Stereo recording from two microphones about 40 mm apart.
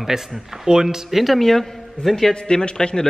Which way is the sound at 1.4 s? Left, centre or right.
Centre.